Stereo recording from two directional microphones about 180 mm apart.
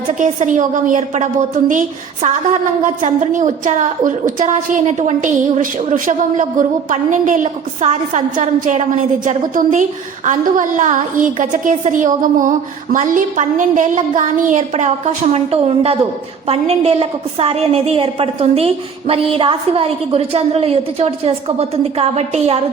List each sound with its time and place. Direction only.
0.2 s a woman's voice: 45° right (ahead or behind)